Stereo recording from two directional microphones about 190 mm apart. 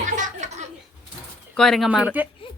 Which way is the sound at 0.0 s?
40° right (ahead or behind).